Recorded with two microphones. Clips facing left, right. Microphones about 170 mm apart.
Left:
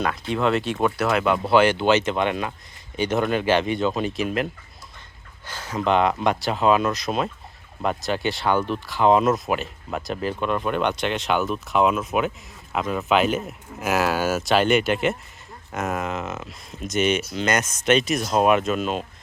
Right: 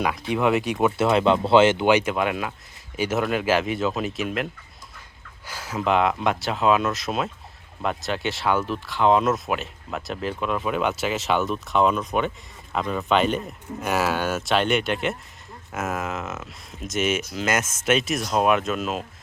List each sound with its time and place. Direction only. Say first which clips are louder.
0.0 s speech: even; 10° right (ahead or behind)
0.9 s speech: right 2 dB; 25° right (ahead or behind); by 4.4 s centre (ahead or behind)
5.5 s speech: left 1 dB; 10° right (ahead or behind)